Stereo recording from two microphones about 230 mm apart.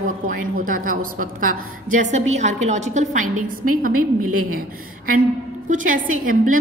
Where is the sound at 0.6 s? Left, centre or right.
Right.